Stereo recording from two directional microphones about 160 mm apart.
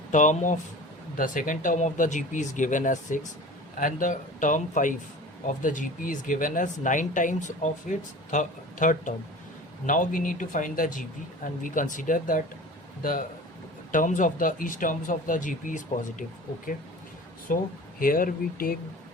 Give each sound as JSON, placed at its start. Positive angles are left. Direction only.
{"t": 0.1, "sound": "speech", "side_deg": 50}
{"t": 17.5, "sound": "speech", "side_deg": 60}